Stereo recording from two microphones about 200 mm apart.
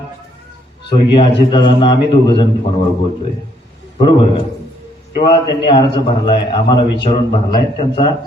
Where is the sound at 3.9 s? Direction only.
25° left (ahead or behind).